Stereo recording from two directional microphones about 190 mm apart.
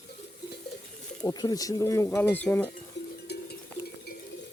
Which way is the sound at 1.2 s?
20° left (ahead or behind).